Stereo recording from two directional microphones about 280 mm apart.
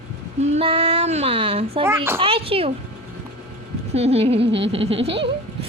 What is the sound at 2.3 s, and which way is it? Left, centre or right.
Speech, centre.